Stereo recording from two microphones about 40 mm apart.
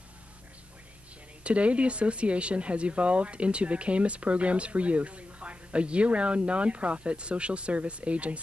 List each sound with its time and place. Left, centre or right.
1.4 s speech: right